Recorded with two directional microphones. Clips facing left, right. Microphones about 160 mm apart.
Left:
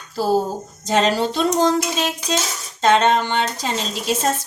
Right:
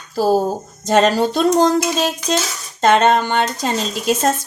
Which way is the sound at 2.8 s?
50° right (ahead or behind).